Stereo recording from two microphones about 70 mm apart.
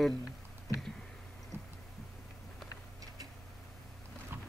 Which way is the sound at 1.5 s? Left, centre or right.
Right.